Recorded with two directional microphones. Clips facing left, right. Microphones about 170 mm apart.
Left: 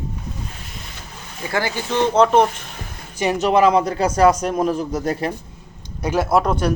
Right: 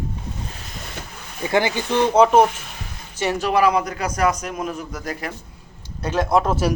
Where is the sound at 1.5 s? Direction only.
20° right (ahead or behind).